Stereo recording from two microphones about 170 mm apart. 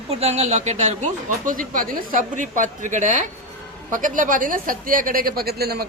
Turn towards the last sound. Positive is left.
turn(degrees=-70)  # may be behind; listen again after turning